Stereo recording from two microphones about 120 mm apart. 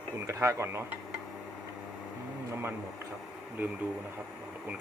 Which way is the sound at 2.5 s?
20° right (ahead or behind).